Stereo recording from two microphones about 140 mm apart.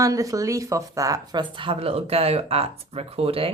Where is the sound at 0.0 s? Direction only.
25° right (ahead or behind).